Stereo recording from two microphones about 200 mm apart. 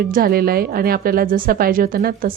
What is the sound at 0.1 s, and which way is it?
Speech, 50° right (ahead or behind).